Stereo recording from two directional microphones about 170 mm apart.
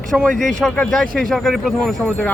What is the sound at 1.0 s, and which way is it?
Speech, 55° right (ahead or behind).